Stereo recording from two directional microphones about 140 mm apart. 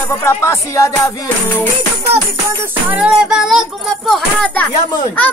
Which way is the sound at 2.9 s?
5° right (ahead or behind).